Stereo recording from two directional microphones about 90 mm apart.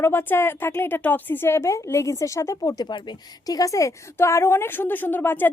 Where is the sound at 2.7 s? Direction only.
55° left (ahead or behind).